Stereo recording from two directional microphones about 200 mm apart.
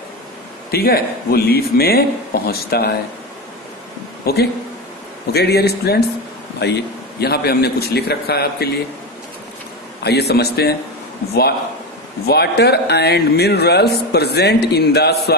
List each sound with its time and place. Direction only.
0.7 s speech: 50° left (ahead or behind)
4.2 s speech: 50° left (ahead or behind)
10.0 s speech: 55° left (ahead or behind)
12.3 s speech: 55° left (ahead or behind)